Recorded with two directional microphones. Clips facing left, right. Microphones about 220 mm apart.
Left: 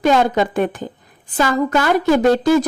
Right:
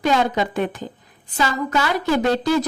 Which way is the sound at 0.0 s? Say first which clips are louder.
Left 4 dB; 50° left (ahead or behind).